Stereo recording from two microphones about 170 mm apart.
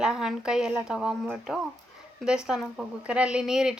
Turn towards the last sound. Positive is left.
turn(degrees=-5)  # may be behind; listen again after turning